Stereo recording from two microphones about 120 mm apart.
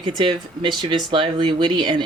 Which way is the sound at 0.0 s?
40° right (ahead or behind).